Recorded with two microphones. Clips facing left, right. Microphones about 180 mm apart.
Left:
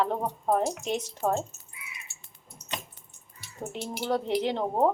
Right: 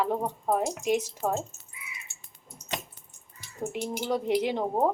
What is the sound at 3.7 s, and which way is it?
Speech, 15° right (ahead or behind).